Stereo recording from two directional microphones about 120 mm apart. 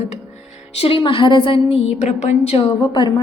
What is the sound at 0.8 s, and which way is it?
Speech, 50° left (ahead or behind).